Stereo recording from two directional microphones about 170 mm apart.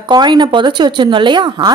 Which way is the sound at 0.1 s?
25° right (ahead or behind).